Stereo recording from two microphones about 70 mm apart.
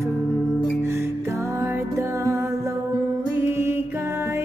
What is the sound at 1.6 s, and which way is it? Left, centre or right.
Music, right.